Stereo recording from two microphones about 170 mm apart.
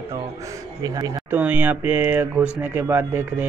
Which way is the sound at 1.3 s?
10° right (ahead or behind).